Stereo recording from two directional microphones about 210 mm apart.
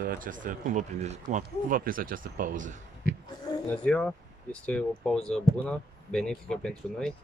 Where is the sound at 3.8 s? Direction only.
5° left (ahead or behind).